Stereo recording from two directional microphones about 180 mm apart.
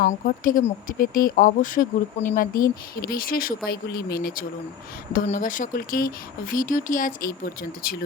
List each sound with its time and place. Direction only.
0.0 s speech: 45° left (ahead or behind)
5.1 s speech: 45° left (ahead or behind)